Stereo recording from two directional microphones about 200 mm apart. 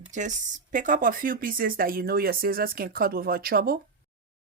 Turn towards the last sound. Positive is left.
turn(degrees=-50)  # may be behind; listen again after turning